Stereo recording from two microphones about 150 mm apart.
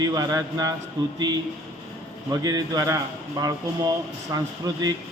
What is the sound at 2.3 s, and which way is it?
A man's voice, 25° right (ahead or behind).